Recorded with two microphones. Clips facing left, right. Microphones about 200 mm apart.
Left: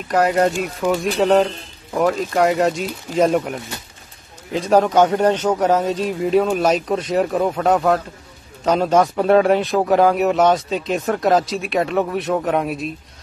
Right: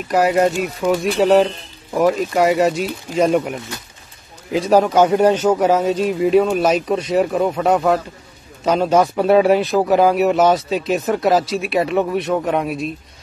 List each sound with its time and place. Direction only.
0.7 s a man's voice: centre (ahead or behind)